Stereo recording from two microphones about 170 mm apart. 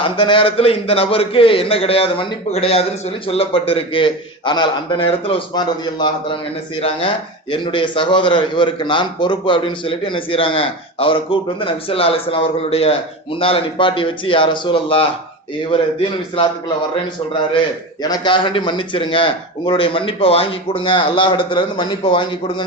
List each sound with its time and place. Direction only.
0.0 s a man's voice: 30° left (ahead or behind)
7.5 s a man's voice: 30° left (ahead or behind)
18.0 s a man's voice: 25° left (ahead or behind)